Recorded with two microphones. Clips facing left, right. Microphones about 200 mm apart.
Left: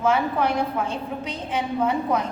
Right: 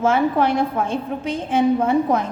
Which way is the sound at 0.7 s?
45° right (ahead or behind).